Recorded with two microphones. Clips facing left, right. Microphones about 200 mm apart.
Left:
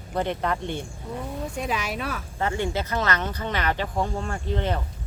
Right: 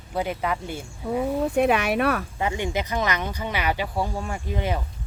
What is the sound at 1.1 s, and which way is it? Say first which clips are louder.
A woman's voice: right 9 dB; 65° right (ahead or behind).